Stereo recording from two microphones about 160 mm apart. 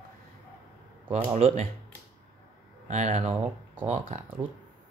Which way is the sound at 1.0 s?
35° right (ahead or behind).